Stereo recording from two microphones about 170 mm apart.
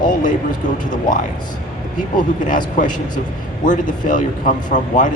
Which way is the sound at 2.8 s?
50° left (ahead or behind).